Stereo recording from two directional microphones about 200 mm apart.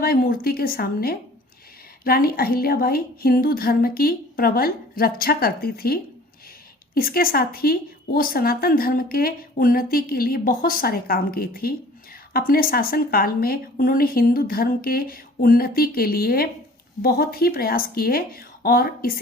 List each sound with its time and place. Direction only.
0.0 s a woman's voice: 45° left (ahead or behind)